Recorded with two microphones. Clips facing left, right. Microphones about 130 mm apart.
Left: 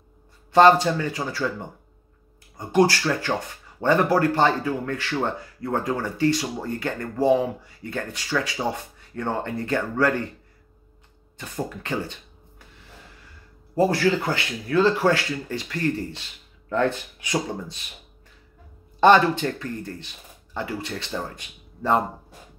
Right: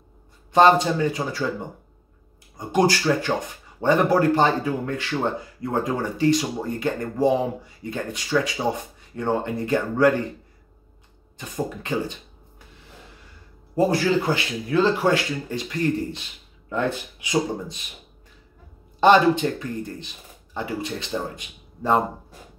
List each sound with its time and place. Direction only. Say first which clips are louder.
0.5 s speech: left 1 dB; 20° right (ahead or behind)
2.5 s speech: left 1 dB; 15° right (ahead or behind)
11.3 s speech: right 2 dB; 15° right (ahead or behind)
13.7 s speech: even; 20° right (ahead or behind)
18.9 s speech: right 1 dB; 15° right (ahead or behind)